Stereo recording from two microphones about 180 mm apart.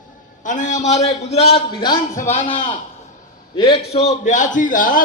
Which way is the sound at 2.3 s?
45° left (ahead or behind).